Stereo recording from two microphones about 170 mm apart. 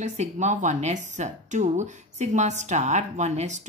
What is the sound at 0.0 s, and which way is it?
Speech, 45° right (ahead or behind).